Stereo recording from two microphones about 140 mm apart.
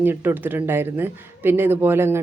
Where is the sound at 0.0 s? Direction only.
15° right (ahead or behind).